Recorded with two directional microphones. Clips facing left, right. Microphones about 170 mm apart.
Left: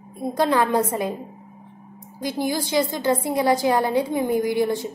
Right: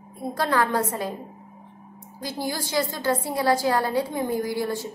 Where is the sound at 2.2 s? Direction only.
20° left (ahead or behind).